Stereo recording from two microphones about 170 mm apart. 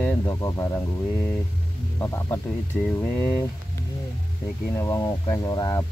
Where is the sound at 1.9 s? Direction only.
15° left (ahead or behind).